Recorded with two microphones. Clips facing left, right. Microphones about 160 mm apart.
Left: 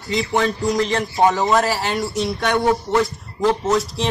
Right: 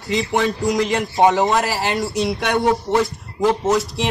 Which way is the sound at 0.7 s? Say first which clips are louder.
Right 1 dB; 15° right (ahead or behind).